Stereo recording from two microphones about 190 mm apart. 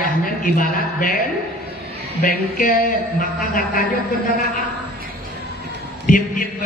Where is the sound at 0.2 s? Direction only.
45° left (ahead or behind).